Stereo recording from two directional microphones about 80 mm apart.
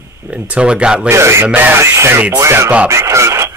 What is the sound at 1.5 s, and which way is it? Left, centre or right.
Speech, right.